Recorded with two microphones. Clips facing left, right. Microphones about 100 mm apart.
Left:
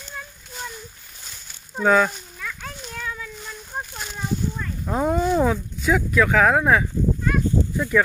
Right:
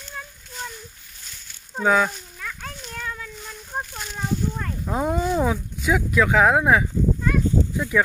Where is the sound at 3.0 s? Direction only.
45° right (ahead or behind).